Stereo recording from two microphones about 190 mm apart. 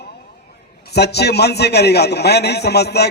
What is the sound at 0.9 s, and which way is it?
A man's voice, 60° left (ahead or behind).